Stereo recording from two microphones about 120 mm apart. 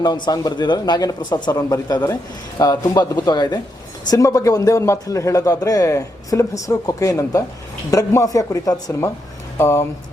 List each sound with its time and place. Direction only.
0.0 s a man's voice: 35° left (ahead or behind)